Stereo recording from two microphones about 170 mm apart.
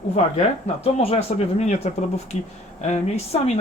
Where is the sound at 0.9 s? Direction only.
40° left (ahead or behind).